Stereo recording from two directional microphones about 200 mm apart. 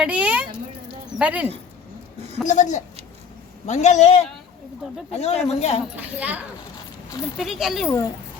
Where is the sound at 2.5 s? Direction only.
40° left (ahead or behind).